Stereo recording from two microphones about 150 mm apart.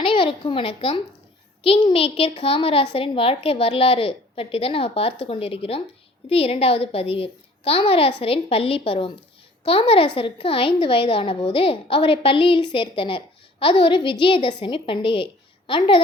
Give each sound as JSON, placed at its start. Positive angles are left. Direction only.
{"t": 0.0, "sound": "a child's voice", "side_deg": 35}